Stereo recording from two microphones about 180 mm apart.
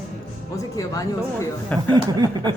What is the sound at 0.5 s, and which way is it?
Speech, 20° left (ahead or behind).